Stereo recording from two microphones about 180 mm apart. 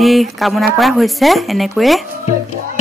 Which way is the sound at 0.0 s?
Centre (ahead or behind).